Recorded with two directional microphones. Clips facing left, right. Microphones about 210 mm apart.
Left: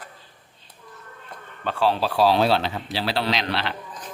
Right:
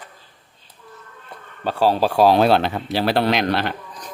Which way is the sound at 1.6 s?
40° right (ahead or behind).